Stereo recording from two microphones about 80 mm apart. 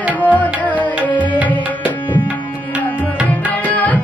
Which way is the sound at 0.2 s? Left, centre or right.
Centre.